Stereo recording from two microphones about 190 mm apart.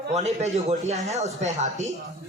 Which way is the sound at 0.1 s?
35° right (ahead or behind).